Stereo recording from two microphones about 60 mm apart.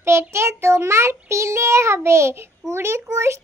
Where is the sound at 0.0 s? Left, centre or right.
Right.